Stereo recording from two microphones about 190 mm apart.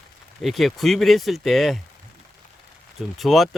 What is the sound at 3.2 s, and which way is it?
Speech, centre (ahead or behind).